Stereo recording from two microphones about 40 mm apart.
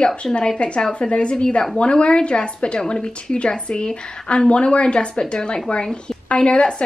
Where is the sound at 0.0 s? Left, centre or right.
Left.